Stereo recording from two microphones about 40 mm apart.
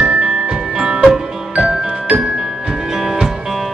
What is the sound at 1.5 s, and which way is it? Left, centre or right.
Music, right.